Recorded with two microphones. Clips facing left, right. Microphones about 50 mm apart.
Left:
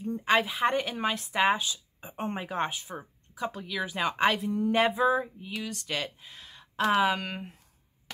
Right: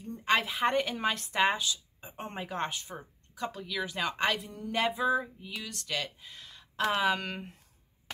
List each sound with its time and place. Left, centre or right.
0.0 s speech: centre
1.6 s speech: left
4.6 s a sound: centre
4.9 s speech: centre